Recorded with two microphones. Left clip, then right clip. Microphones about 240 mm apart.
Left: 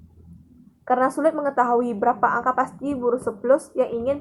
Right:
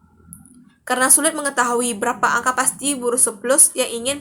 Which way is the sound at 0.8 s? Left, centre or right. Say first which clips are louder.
Right 1 dB; right.